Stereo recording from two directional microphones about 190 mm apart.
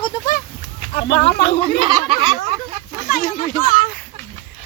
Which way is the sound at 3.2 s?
45° left (ahead or behind).